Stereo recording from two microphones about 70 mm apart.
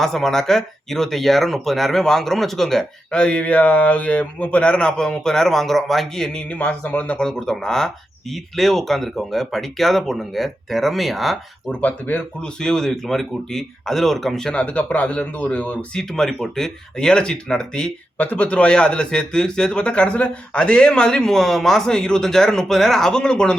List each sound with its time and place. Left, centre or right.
0.0 s speech: centre
11.7 s speech: left
12.5 s speech: centre
14.5 s speech: left
16.0 s speech: centre
18.2 s speech: left